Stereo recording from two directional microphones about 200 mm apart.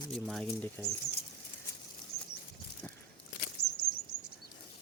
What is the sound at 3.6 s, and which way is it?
Bird flight, 90° left.